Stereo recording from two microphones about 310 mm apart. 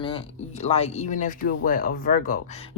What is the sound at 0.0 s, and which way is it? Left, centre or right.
Speech, centre.